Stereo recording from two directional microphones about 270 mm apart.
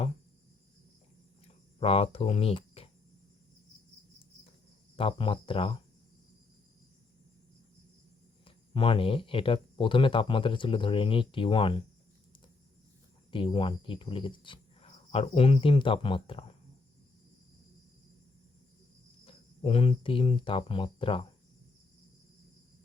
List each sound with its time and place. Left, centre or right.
1.8 s speech: left
4.9 s speech: centre
8.4 s speech: centre
13.3 s speech: centre
19.2 s speech: left